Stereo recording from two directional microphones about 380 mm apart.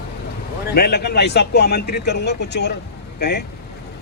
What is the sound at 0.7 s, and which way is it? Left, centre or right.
A man's voice, left.